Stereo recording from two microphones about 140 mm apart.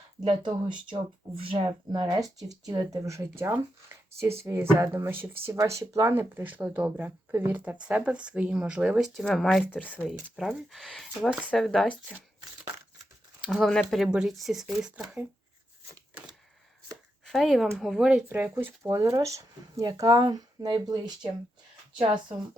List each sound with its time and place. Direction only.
0.3 s speech: 30° right (ahead or behind); by 11.9 s centre (ahead or behind)
13.5 s speech: 5° left (ahead or behind)
17.2 s speech: centre (ahead or behind); by 22.4 s 35° right (ahead or behind)